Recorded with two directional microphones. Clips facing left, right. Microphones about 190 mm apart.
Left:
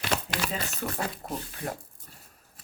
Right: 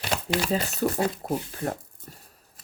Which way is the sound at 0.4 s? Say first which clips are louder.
Right 7 dB; 35° right (ahead or behind).